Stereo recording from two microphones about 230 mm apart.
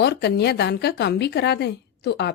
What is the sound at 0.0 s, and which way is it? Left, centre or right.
Speech, left.